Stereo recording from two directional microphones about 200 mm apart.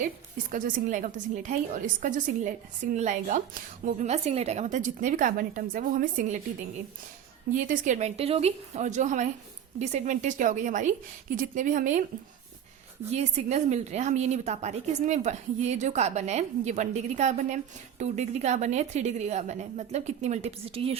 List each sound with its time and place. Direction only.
0.5 s a woman's voice: 40° right (ahead or behind)
7.5 s a woman's voice: 40° right (ahead or behind)
13.1 s a woman's voice: 35° right (ahead or behind)